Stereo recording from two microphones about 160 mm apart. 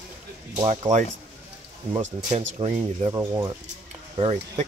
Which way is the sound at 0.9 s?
50° right (ahead or behind).